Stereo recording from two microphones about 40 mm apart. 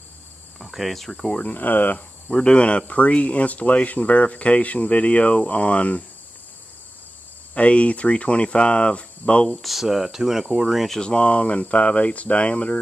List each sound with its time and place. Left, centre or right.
0.6 s speech: centre
1.1 s speech: centre
1.4 s speech: left
2.3 s speech: left
7.5 s speech: left
9.6 s speech: centre
11.0 s speech: left